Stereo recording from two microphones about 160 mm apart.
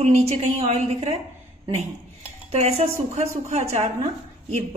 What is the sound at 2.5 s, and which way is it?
A woman's voice, 40° right (ahead or behind).